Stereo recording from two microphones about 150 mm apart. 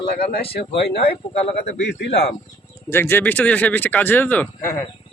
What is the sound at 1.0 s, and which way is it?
Speech, 45° left (ahead or behind).